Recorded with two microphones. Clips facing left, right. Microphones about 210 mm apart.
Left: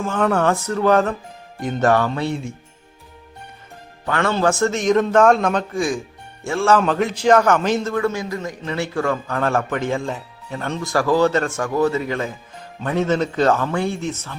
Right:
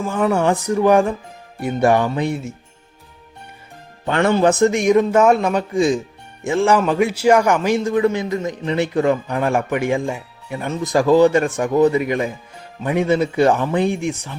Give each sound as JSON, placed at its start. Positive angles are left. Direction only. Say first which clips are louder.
{"t": 0.1, "sound": "a man's voice", "louder": "right 1 dB", "side_deg": -10}
{"t": 4.0, "sound": "a man's voice", "louder": "right 4 dB", "side_deg": -20}
{"t": 5.7, "sound": "a man's voice", "louder": "right 5 dB", "side_deg": -20}